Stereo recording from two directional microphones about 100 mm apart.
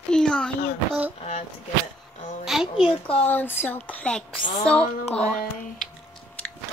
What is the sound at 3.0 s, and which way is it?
Speech, 15° left (ahead or behind).